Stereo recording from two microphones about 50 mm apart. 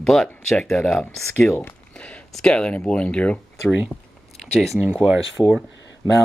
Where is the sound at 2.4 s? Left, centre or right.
Centre.